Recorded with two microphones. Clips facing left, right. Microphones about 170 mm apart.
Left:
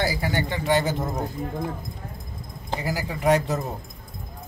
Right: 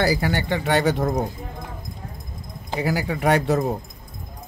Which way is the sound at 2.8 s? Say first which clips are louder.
Right 4 dB; 65° right (ahead or behind).